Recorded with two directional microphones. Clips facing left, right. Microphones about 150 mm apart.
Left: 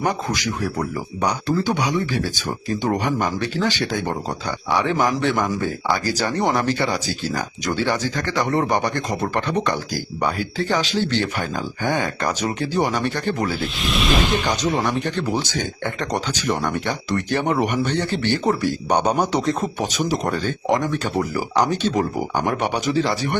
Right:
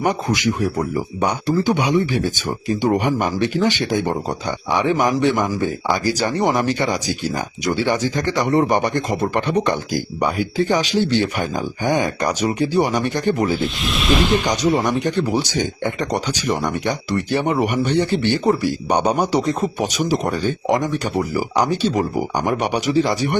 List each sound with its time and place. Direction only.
0.0 s speech: 20° right (ahead or behind)
13.6 s speech: centre (ahead or behind)
14.4 s speech: 10° right (ahead or behind)